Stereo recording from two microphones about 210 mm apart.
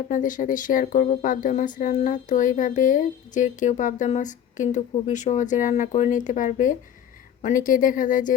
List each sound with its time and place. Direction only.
0.1 s speech: 40° left (ahead or behind)